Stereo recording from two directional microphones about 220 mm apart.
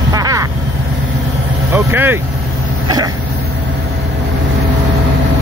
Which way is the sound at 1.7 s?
10° right (ahead or behind).